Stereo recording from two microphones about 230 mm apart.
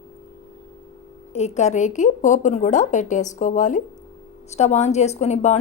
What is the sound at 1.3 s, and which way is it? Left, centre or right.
A woman's voice, left.